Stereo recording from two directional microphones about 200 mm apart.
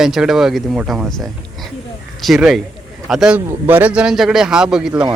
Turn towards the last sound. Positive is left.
turn(degrees=-5)  # may be behind; listen again after turning